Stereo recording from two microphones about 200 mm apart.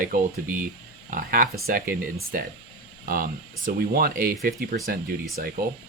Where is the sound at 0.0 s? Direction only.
45° right (ahead or behind).